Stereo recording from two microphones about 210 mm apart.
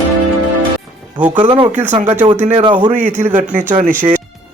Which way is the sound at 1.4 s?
25° right (ahead or behind).